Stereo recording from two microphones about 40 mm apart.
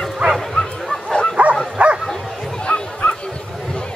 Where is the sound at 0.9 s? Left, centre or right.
Centre.